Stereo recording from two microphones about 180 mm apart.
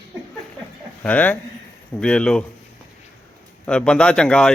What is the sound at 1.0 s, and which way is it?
A man's voice, 10° left (ahead or behind).